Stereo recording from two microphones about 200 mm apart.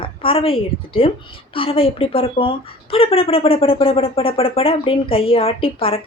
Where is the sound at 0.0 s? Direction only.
25° left (ahead or behind).